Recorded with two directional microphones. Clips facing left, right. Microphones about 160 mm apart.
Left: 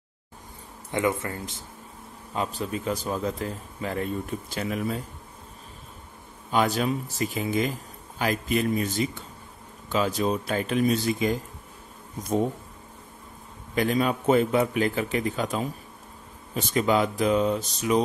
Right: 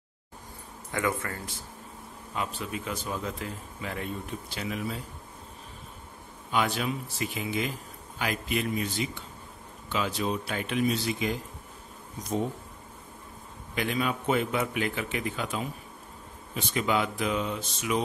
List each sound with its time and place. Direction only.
0.9 s a man's voice: 20° left (ahead or behind)
2.3 s a man's voice: 35° left (ahead or behind)
6.5 s a man's voice: 40° left (ahead or behind)
13.7 s a man's voice: 40° left (ahead or behind)